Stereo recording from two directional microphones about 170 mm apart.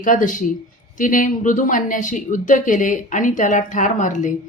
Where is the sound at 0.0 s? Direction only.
50° left (ahead or behind).